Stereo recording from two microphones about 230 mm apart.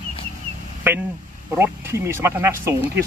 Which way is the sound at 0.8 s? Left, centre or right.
Centre.